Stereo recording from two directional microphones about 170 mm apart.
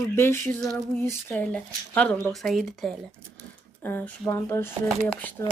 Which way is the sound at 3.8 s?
15° left (ahead or behind).